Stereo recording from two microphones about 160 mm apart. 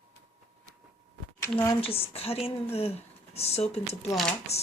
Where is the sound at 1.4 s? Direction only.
15° left (ahead or behind).